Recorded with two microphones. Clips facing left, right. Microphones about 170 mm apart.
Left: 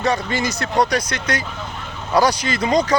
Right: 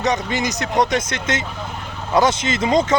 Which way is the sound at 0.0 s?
20° right (ahead or behind).